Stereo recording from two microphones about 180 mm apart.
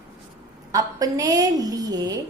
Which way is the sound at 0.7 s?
20° right (ahead or behind).